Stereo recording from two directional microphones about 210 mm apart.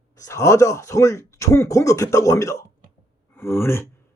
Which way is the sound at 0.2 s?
15° left (ahead or behind).